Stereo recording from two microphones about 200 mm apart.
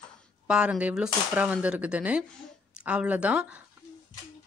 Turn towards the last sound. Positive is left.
turn(degrees=-5)  # may be behind; listen again after turning